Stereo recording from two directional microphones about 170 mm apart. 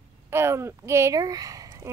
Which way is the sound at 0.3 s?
15° right (ahead or behind).